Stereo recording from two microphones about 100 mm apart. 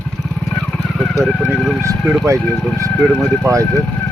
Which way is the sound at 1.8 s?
30° right (ahead or behind).